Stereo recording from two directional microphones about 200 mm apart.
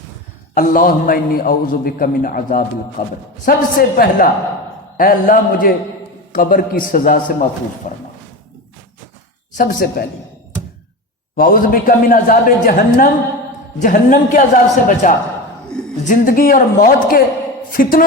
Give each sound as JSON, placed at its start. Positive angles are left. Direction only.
{"t": 0.5, "sound": "a man's voice", "side_deg": 45}
{"t": 9.6, "sound": "a man's voice", "side_deg": 45}
{"t": 11.3, "sound": "a man's voice", "side_deg": 45}
{"t": 15.7, "sound": "a sound", "side_deg": 5}
{"t": 16.0, "sound": "a man's voice", "side_deg": 40}